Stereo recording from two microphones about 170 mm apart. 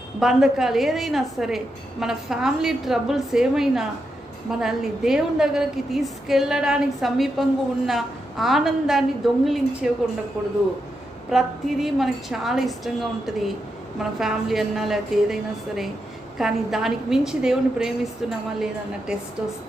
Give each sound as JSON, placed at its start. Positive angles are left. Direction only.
{"t": 0.2, "sound": "a woman's voice", "side_deg": 0}